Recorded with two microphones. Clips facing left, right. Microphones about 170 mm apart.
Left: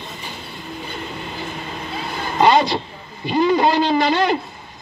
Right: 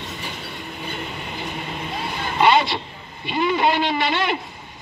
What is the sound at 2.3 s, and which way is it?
A man's voice, 40° left (ahead or behind).